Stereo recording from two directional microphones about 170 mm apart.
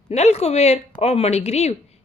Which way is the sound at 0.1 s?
40° left (ahead or behind).